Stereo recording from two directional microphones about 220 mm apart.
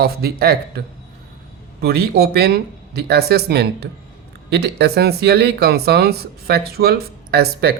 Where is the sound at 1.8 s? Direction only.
45° right (ahead or behind).